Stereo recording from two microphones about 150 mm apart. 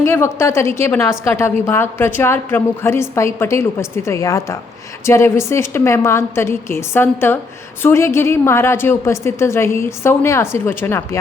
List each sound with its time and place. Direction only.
0.0 s a woman's voice: 15° left (ahead or behind)